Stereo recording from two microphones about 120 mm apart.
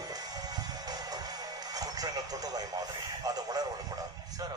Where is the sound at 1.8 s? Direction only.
30° right (ahead or behind).